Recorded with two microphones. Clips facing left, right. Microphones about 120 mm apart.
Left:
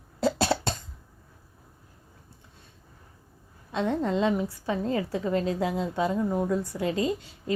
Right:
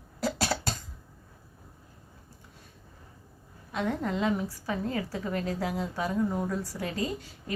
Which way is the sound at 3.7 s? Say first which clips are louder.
Left 4 dB; 25° left (ahead or behind).